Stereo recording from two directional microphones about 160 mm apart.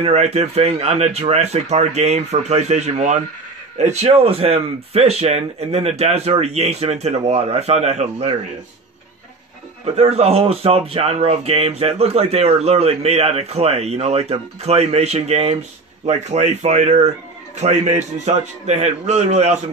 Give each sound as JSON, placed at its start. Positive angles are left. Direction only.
{"t": 0.0, "sound": "speech", "side_deg": -40}
{"t": 9.9, "sound": "speech", "side_deg": -40}